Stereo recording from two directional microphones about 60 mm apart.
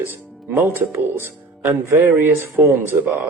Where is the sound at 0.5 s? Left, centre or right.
Right.